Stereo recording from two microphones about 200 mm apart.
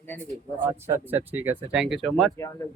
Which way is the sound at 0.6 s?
10° right (ahead or behind).